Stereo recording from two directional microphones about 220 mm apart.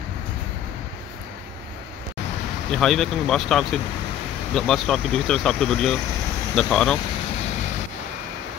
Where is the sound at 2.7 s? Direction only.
Centre (ahead or behind).